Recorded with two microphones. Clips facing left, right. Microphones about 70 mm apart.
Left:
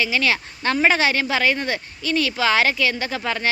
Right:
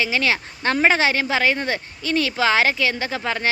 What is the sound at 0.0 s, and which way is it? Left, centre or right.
Speech, right.